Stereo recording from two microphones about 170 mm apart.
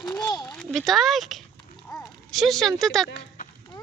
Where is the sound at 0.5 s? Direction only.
Centre (ahead or behind).